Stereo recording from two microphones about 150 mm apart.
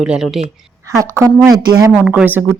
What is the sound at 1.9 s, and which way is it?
Speech, 5° right (ahead or behind).